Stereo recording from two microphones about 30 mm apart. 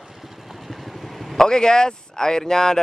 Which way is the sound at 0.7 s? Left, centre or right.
Centre.